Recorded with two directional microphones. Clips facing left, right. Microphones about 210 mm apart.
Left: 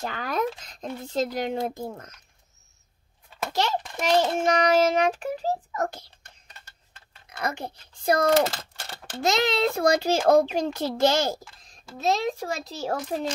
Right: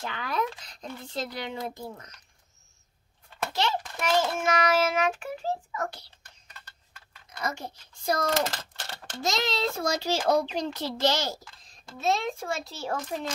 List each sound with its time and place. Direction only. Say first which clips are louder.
0.0 s a child's voice: left 3 dB; 45° left (ahead or behind)
4.0 s a child's voice: left 4 dB; 35° left (ahead or behind)
7.2 s a child's voice: left 3 dB; 60° left (ahead or behind)
12.0 s a child's voice: left 3 dB; 40° left (ahead or behind)